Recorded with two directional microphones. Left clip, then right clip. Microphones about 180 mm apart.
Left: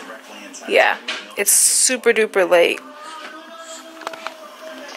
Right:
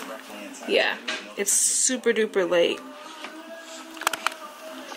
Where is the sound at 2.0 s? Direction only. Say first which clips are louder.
Left 8 dB; 25° right (ahead or behind).